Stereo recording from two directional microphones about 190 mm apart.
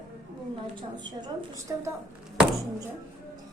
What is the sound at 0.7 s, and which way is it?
A woman's voice, 25° right (ahead or behind).